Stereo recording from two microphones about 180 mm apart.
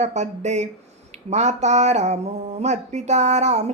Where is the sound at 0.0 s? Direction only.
40° right (ahead or behind).